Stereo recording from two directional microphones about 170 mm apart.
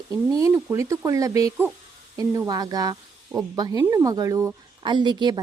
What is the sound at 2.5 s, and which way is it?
A woman's voice, 25° right (ahead or behind).